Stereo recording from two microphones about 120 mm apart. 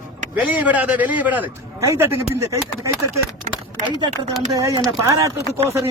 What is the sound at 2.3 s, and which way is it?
Speech, 25° right (ahead or behind).